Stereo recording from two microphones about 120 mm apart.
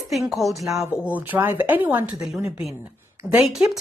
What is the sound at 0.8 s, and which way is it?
Speech, 20° left (ahead or behind).